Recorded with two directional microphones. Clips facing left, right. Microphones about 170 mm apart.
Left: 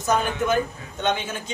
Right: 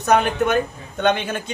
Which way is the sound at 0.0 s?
65° right (ahead or behind).